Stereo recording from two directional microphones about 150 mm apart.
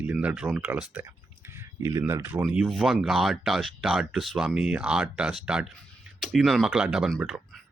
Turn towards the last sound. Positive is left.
turn(degrees=-5)  # may be behind; listen again after turning